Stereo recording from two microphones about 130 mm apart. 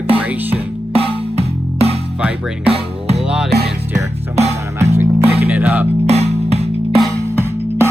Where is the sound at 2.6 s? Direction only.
50° right (ahead or behind).